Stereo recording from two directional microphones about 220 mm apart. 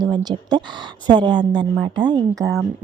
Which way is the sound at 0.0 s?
20° right (ahead or behind).